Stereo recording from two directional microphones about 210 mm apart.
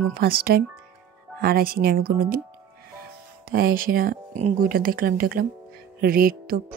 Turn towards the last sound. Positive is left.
turn(degrees=-45)  # may be behind; listen again after turning